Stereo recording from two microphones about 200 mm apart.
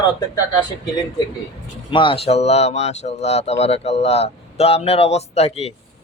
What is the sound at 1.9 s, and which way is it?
Speech, 25° left (ahead or behind).